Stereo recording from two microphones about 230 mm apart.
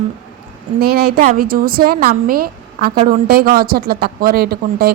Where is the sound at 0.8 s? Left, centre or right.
Right.